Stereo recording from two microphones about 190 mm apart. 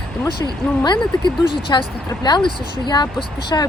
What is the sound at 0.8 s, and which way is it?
Speech, 25° left (ahead or behind).